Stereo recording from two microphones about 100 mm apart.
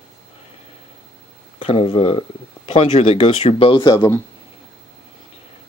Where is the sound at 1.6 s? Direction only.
65° left (ahead or behind).